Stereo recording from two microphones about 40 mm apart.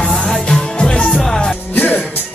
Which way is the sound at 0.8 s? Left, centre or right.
Left.